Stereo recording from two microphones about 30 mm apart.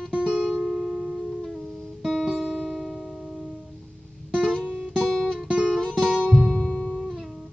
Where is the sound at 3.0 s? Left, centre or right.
Centre.